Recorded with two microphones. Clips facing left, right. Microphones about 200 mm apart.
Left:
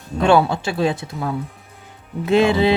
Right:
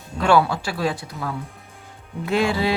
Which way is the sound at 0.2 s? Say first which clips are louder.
Left 3 dB; 25° left (ahead or behind).